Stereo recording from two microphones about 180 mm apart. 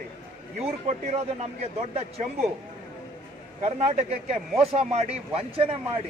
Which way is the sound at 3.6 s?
35° right (ahead or behind).